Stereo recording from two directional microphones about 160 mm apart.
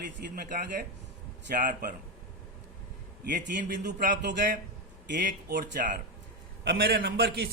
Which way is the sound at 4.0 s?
60° right (ahead or behind).